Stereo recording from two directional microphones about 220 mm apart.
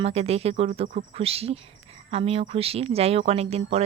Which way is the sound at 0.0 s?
30° right (ahead or behind).